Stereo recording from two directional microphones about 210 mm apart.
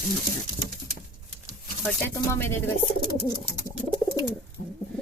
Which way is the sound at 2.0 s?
10° left (ahead or behind).